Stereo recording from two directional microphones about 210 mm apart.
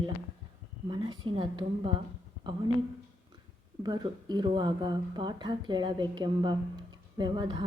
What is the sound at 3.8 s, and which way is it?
Speech, 20° right (ahead or behind).